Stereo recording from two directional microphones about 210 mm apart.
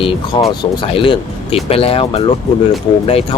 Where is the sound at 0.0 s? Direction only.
25° left (ahead or behind).